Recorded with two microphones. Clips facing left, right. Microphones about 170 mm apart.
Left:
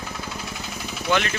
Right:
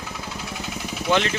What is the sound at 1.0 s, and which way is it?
Speech, 25° right (ahead or behind).